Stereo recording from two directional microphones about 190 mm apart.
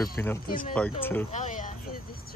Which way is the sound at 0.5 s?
45° left (ahead or behind).